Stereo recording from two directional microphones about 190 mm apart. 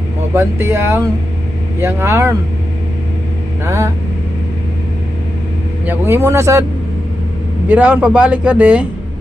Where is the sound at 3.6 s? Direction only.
15° right (ahead or behind).